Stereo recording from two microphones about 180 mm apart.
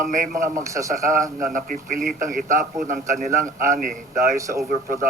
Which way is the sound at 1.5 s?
50° right (ahead or behind).